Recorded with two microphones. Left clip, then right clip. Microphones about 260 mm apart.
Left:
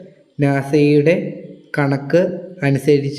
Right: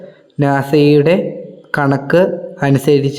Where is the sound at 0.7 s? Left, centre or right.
Centre.